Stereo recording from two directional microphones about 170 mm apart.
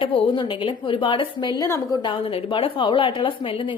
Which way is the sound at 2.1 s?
30° left (ahead or behind).